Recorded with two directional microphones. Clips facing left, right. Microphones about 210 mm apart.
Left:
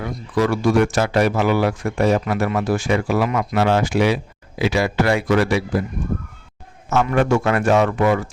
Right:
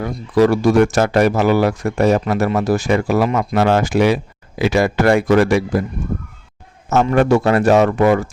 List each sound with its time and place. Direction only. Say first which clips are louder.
0.0 s a man's voice: right 6 dB; 40° right (ahead or behind)
6.9 s a man's voice: right 4 dB; 40° right (ahead or behind)